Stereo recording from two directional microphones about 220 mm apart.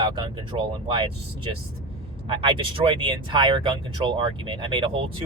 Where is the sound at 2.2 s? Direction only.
25° right (ahead or behind).